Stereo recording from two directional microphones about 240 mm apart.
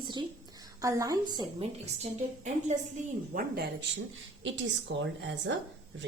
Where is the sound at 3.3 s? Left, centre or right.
Right.